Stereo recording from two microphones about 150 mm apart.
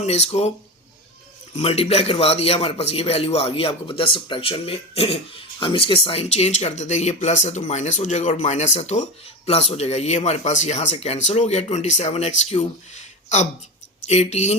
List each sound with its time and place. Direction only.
0.0 s a man's voice: 45° left (ahead or behind)
1.5 s a man's voice: 45° left (ahead or behind)